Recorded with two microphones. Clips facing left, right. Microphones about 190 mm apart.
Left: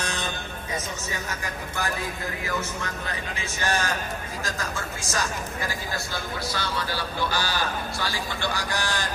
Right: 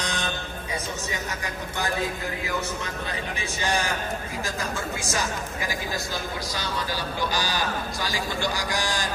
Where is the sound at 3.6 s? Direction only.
15° right (ahead or behind).